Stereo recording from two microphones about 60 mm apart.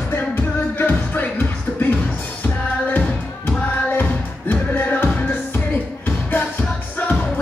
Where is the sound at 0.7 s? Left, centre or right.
Left.